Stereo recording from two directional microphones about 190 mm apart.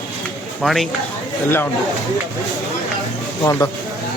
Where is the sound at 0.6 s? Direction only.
Centre (ahead or behind).